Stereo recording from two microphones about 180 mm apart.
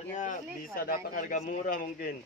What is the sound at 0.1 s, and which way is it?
Speech, 45° left (ahead or behind).